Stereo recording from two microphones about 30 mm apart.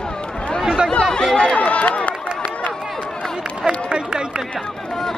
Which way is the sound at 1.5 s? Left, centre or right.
Left.